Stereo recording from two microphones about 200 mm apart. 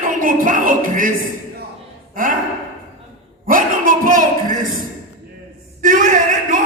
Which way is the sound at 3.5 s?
45° right (ahead or behind).